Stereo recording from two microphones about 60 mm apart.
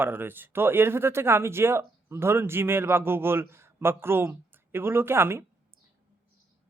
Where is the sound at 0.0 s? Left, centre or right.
Right.